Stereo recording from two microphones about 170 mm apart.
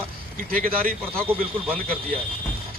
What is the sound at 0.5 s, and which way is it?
Speech, 55° right (ahead or behind).